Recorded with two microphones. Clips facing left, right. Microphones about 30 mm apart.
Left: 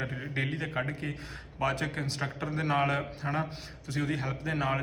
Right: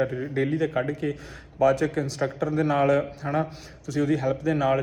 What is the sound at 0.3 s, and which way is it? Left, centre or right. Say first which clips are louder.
A man's voice: right 8 dB; left.